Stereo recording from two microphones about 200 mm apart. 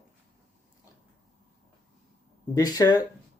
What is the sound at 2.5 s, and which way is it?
Speech, 20° left (ahead or behind).